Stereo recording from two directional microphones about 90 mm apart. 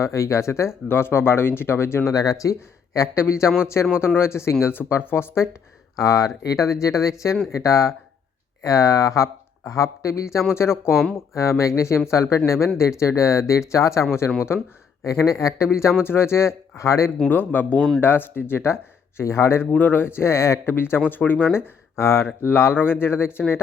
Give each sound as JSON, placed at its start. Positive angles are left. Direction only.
{"t": 0.0, "sound": "speech", "side_deg": 35}
{"t": 2.1, "sound": "speech", "side_deg": 40}
{"t": 6.0, "sound": "speech", "side_deg": 40}
{"t": 17.2, "sound": "speech", "side_deg": 20}